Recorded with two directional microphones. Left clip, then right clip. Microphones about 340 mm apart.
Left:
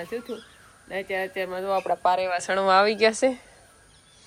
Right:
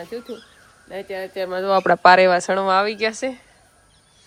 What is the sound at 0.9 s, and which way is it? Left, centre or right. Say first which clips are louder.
Speech: even; centre.